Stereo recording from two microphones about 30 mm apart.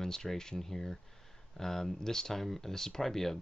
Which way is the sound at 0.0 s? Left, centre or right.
Centre.